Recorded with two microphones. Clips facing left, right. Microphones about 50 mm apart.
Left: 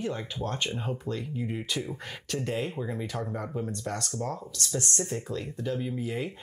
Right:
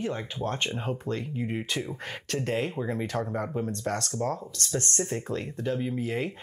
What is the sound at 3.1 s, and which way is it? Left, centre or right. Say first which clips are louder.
Speech: right 4 dB; right.